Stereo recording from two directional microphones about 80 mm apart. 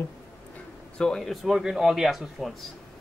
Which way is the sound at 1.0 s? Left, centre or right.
Centre.